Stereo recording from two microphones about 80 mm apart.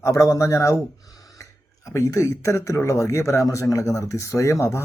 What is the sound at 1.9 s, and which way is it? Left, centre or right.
Speech, left.